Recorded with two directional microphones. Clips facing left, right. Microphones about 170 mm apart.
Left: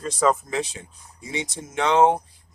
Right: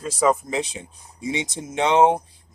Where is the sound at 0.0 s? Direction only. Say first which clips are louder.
Right 1 dB; 10° right (ahead or behind).